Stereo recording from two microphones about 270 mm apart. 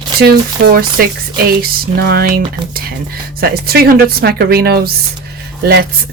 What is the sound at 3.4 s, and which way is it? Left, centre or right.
Speech, right.